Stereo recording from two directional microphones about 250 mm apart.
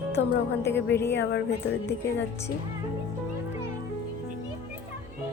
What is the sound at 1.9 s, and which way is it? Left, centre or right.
Speech, centre.